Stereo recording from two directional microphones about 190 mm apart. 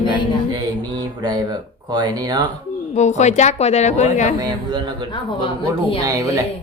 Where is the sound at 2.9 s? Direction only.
40° left (ahead or behind).